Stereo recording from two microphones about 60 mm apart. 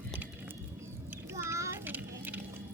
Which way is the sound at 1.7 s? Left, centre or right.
Right.